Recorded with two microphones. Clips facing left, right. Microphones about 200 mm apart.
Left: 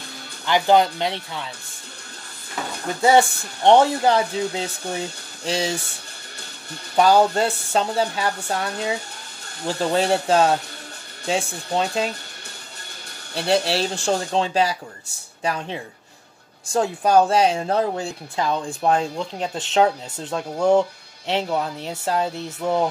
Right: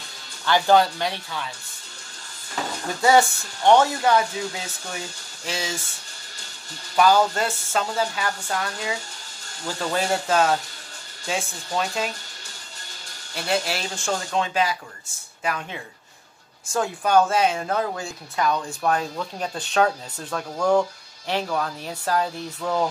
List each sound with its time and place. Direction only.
0.5 s speech: 20° left (ahead or behind)
3.0 s a woman's voice: 25° left (ahead or behind)
7.0 s a woman's voice: 30° left (ahead or behind)
13.3 s a woman's voice: 35° left (ahead or behind)